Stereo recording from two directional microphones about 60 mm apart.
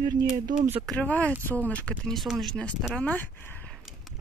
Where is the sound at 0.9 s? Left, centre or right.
Left.